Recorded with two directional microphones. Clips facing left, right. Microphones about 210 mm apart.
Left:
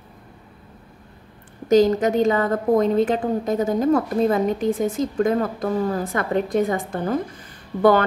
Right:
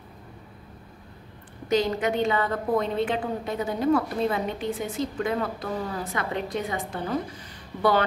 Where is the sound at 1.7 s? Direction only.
45° left (ahead or behind).